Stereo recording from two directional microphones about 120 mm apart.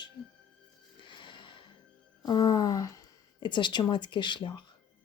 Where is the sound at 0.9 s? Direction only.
40° left (ahead or behind).